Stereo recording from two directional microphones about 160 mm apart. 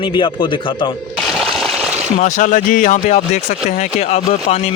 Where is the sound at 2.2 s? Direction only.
55° left (ahead or behind).